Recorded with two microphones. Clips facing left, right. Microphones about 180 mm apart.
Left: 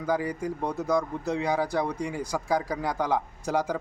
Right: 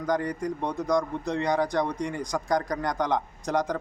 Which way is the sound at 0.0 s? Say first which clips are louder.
Right 1 dB; 5° left (ahead or behind).